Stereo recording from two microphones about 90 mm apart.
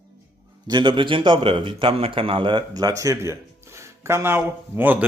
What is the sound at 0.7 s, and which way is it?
A man's voice, 60° right (ahead or behind).